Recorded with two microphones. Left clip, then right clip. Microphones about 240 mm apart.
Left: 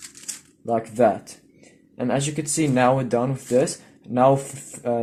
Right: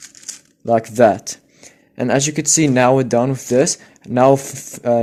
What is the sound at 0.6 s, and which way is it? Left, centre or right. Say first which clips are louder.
Speech: right 7 dB; right.